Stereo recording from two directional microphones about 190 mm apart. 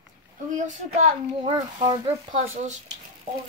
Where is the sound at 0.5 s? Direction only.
40° right (ahead or behind).